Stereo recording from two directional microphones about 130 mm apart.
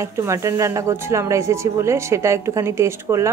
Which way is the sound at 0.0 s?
20° right (ahead or behind).